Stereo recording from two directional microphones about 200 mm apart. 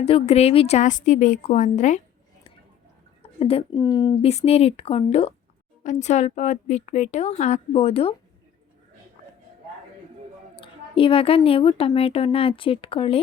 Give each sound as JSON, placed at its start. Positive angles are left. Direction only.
{"t": 0.0, "sound": "a woman's voice", "side_deg": 30}
{"t": 3.4, "sound": "a woman's voice", "side_deg": 25}
{"t": 4.3, "sound": "a woman's voice", "side_deg": 30}
{"t": 10.5, "sound": "a woman's voice", "side_deg": 25}